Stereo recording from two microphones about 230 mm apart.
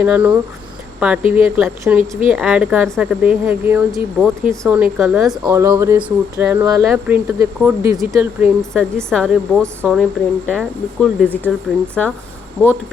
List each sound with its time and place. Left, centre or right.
0.0 s a woman's voice: centre
5.5 s a woman's voice: centre